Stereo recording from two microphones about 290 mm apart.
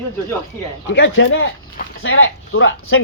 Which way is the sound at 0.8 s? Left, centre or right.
Left.